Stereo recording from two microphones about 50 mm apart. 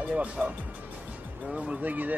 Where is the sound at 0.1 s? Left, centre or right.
Right.